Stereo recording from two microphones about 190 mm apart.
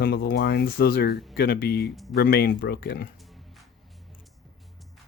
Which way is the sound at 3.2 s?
Centre (ahead or behind).